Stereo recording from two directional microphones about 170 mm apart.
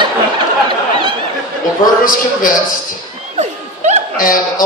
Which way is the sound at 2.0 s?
55° left (ahead or behind).